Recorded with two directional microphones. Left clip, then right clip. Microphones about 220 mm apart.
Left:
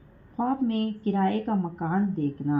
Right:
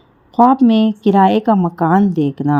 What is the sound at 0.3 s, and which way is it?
Speech, 45° right (ahead or behind).